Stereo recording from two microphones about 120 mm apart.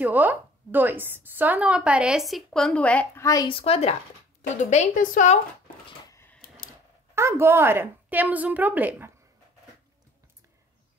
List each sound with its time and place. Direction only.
0.0 s a woman's voice: 15° right (ahead or behind); by 3.1 s 10° left (ahead or behind)
3.2 s a woman's voice: 25° left (ahead or behind)
3.4 s speech: 50° left (ahead or behind)
4.4 s a woman's voice: 75° left (ahead or behind)
6.0 s a sound: 25° left (ahead or behind)
7.2 s a woman's voice: 20° right (ahead or behind)